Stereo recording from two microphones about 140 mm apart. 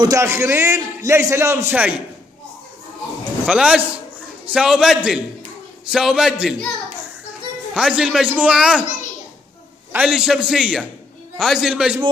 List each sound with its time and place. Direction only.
0.0 s a man's voice: 20° right (ahead or behind)
3.4 s a man's voice: 5° right (ahead or behind)
7.7 s a man's voice: 5° right (ahead or behind)
9.9 s a man's voice: 5° right (ahead or behind)